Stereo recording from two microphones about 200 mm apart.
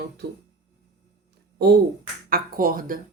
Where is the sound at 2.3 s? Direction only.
45° right (ahead or behind).